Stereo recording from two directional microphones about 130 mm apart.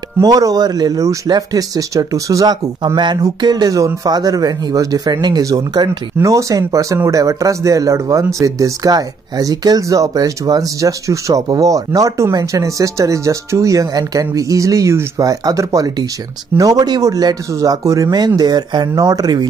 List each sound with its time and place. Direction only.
0.2 s speech: 30° right (ahead or behind)